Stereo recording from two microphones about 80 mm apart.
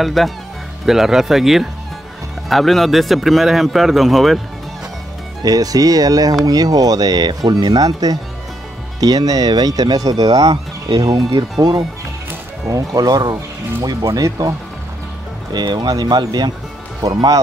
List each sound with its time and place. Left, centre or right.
0.0 s speech: centre
5.4 s speech: right
11.1 s speech: right
12.6 s speech: right
14.0 s speech: right
15.5 s speech: right